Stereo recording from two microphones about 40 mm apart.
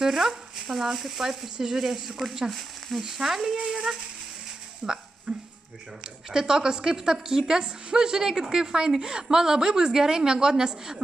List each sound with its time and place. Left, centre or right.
0.0 s a woman's voice: centre
3.5 s speech: right
3.8 s a woman's voice: centre